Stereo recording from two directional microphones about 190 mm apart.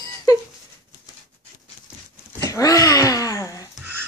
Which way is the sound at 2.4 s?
20° left (ahead or behind).